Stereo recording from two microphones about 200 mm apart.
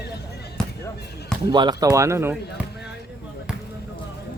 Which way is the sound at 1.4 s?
20° right (ahead or behind).